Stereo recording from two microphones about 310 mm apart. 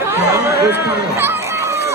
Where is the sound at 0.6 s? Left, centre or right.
Centre.